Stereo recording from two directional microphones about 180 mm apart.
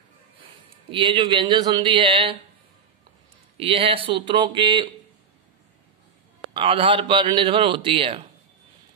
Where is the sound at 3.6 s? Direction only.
30° right (ahead or behind).